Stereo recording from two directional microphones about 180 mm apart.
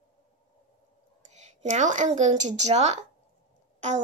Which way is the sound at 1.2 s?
40° right (ahead or behind).